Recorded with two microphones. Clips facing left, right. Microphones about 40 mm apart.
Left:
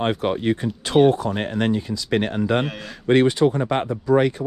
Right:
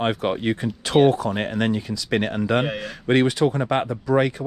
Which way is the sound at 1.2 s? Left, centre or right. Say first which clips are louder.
Even; right.